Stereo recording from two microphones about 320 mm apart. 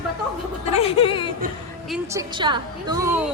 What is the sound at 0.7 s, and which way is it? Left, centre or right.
Speech, centre.